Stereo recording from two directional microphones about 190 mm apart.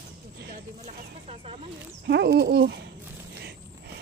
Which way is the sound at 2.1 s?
65° right (ahead or behind).